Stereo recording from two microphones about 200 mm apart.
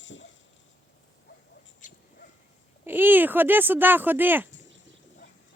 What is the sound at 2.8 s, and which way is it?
Speech, 10° right (ahead or behind).